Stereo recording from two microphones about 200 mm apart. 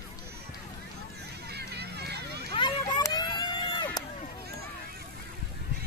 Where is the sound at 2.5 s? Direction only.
20° left (ahead or behind).